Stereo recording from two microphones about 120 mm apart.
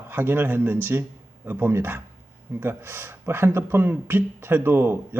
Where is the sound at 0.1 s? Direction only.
15° right (ahead or behind).